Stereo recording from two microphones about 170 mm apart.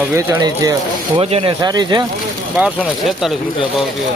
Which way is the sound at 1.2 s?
35° right (ahead or behind).